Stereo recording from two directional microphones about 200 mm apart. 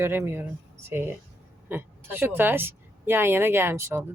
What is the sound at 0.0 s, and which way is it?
A woman's voice, 10° right (ahead or behind).